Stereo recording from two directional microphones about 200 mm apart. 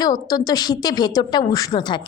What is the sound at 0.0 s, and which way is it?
A woman's voice, 20° left (ahead or behind).